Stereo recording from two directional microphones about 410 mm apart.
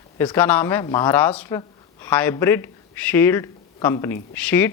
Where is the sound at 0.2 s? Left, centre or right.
Centre.